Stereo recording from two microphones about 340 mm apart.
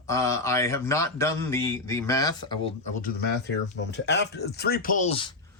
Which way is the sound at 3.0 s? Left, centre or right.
Left.